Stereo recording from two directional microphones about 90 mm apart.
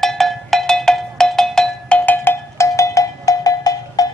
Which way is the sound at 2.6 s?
35° left (ahead or behind).